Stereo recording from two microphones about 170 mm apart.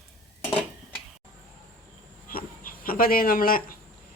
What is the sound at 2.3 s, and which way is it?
Dog, 55° left (ahead or behind).